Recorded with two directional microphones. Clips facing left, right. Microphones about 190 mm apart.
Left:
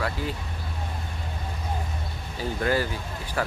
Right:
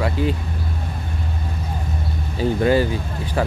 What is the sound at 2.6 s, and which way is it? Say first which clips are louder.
Speech: right 7 dB; 20° right (ahead or behind).